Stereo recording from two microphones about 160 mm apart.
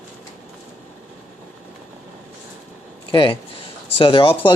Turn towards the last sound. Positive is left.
turn(degrees=35)  # may be behind; listen again after turning